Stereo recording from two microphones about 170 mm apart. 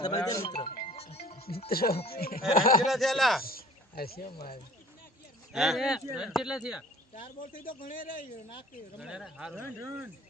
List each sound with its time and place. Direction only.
0.0 s speech: 20° left (ahead or behind)
0.4 s speech: 30° left (ahead or behind)
0.9 s music: 35° left (ahead or behind)
1.7 s a man's voice: 60° left (ahead or behind)
2.8 s speech: centre (ahead or behind)
3.4 s cricket: 60° left (ahead or behind)
5.5 s speech: centre (ahead or behind)
7.3 s a man's voice: 55° left (ahead or behind)
9.0 s speech: 5° right (ahead or behind)
9.6 s speech: 15° right (ahead or behind)